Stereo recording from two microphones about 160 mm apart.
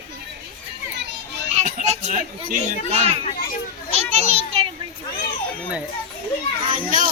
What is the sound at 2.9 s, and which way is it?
Speech, 40° right (ahead or behind).